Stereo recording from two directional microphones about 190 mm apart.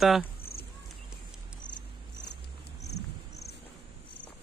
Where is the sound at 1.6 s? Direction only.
45° left (ahead or behind).